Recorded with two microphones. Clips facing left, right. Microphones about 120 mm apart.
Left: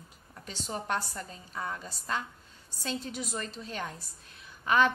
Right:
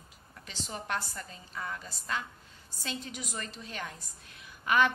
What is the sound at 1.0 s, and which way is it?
Speech, 10° left (ahead or behind).